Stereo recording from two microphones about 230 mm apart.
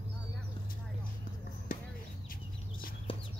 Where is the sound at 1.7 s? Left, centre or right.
Left.